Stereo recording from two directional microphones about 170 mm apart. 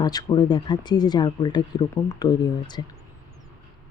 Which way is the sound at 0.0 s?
25° left (ahead or behind).